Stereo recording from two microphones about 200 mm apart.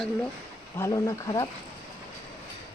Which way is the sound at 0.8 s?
15° left (ahead or behind).